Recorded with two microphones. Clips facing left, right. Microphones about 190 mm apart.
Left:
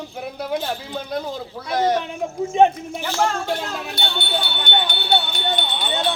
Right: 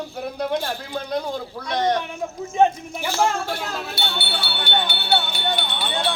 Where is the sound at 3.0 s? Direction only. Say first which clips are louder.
Right 1 dB; 10° right (ahead or behind).